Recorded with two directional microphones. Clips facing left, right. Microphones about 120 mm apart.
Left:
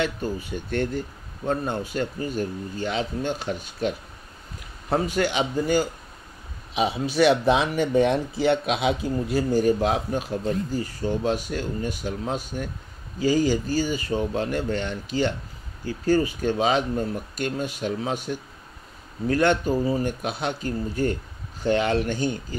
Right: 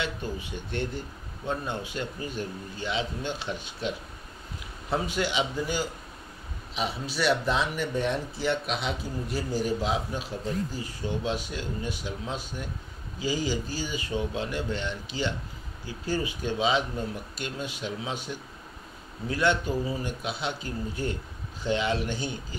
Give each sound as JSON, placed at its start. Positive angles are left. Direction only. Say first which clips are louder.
{"t": 0.0, "sound": "a man's voice", "louder": "left 6 dB", "side_deg": 45}
{"t": 7.1, "sound": "a man's voice", "louder": "left 7 dB", "side_deg": 60}
{"t": 9.3, "sound": "a man's voice", "louder": "left 8 dB", "side_deg": 50}